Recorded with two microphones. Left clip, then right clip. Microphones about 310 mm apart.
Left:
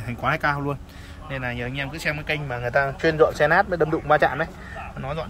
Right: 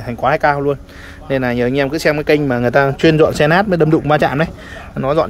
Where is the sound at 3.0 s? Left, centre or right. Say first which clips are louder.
Right 5 dB; right.